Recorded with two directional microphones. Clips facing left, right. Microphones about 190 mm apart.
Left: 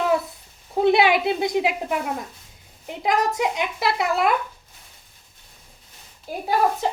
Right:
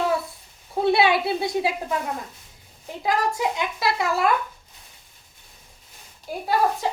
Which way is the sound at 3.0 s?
20° left (ahead or behind).